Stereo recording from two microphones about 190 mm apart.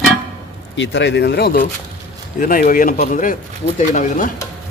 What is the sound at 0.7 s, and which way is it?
Speech, 70° left (ahead or behind).